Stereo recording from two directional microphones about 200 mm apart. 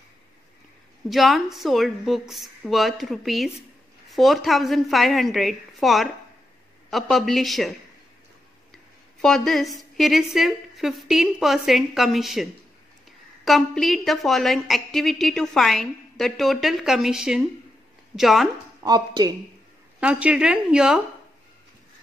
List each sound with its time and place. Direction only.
1.0 s a woman's voice: centre (ahead or behind)
8.7 s a sound: centre (ahead or behind)
9.9 s a woman's voice: centre (ahead or behind)
13.5 s a woman's voice: centre (ahead or behind)
18.8 s speech: 20° right (ahead or behind)
20.0 s a woman's voice: 5° right (ahead or behind)